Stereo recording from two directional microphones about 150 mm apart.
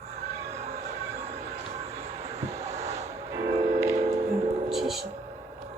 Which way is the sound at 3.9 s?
50° right (ahead or behind).